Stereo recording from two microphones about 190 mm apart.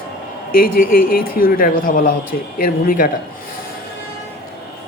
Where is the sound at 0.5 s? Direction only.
50° left (ahead or behind).